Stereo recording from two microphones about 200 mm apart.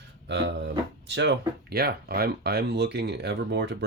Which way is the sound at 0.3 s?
60° right (ahead or behind).